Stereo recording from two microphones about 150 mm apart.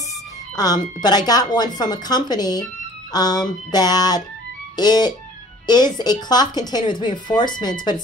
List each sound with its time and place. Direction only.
0.6 s speech: 25° left (ahead or behind)